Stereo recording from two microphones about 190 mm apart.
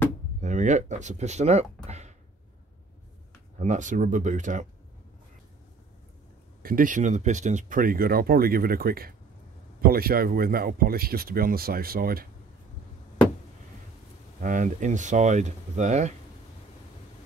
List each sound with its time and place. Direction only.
0.4 s speech: 40° right (ahead or behind)
1.9 s a sound: 35° right (ahead or behind)
3.5 s speech: 40° right (ahead or behind)
6.6 s speech: 45° right (ahead or behind)
14.4 s speech: 40° right (ahead or behind)